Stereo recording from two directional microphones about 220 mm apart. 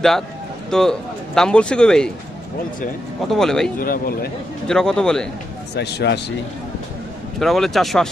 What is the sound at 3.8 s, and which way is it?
Speech, 40° left (ahead or behind).